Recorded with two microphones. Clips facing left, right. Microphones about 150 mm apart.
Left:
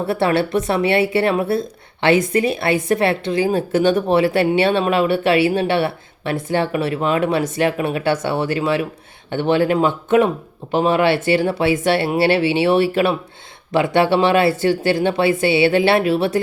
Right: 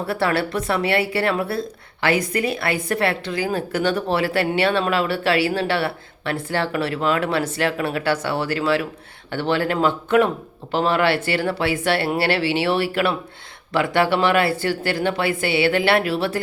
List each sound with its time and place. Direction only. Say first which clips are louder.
0.1 s a woman's voice: left 4 dB; 25° left (ahead or behind)